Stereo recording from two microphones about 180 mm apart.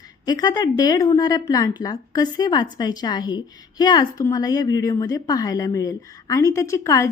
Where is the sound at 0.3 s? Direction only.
20° left (ahead or behind).